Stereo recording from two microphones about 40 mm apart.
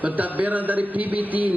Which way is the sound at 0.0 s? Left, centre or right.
Right.